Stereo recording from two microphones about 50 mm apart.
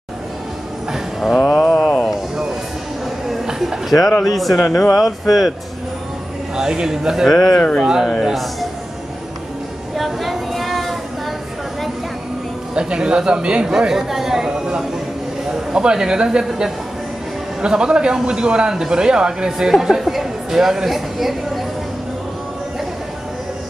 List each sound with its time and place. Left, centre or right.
1.4 s a sound: left
3.3 s a sound: centre
4.2 s speech: centre
4.6 s speech: centre
4.9 s speech: centre
6.5 s a man's voice: centre
7.2 s speech: centre
7.8 s a man's voice: centre
8.3 s speech: centre
9.9 s a sound: centre
12.7 s a man's voice: centre